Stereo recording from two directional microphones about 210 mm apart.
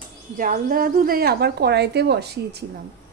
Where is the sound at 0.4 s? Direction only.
40° right (ahead or behind).